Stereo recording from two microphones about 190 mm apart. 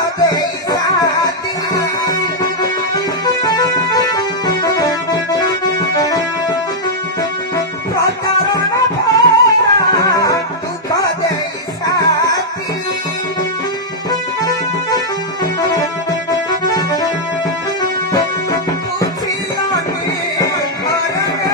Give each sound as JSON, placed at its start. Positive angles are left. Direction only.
{"t": 0.2, "sound": "music", "side_deg": 20}
{"t": 8.5, "sound": "music", "side_deg": 20}
{"t": 11.8, "sound": "music", "side_deg": 20}
{"t": 14.4, "sound": "music", "side_deg": 15}
{"t": 18.1, "sound": "music", "side_deg": 20}
{"t": 20.3, "sound": "music", "side_deg": 20}